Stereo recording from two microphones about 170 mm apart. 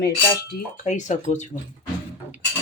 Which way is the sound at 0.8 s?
45° left (ahead or behind).